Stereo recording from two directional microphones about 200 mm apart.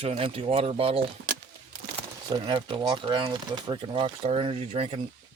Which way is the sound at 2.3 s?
25° right (ahead or behind).